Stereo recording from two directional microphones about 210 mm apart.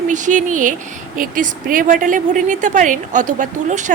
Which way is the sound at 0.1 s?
35° right (ahead or behind).